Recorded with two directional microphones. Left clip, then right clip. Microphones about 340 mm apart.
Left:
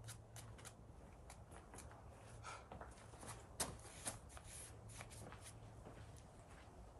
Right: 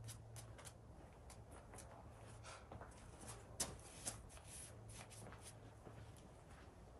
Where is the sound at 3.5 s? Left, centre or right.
Centre.